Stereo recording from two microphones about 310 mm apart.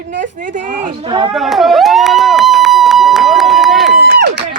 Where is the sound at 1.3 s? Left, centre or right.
Centre.